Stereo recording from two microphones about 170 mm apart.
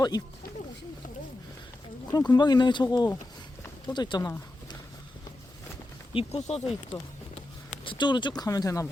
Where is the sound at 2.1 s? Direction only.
25° left (ahead or behind).